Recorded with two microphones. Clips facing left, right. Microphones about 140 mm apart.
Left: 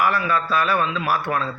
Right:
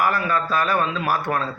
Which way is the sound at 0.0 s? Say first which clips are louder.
Left 1 dB; 45° right (ahead or behind).